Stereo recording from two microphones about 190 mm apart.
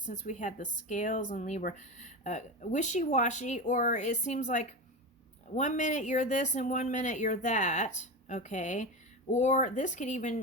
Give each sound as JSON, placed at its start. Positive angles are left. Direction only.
{"t": 0.0, "sound": "a woman's voice", "side_deg": 40}